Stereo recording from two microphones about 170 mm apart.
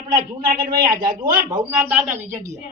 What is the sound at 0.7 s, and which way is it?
Speech, 60° right (ahead or behind).